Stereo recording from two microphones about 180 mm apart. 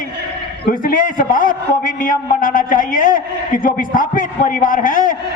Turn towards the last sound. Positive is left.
turn(degrees=50)  # may be behind; listen again after turning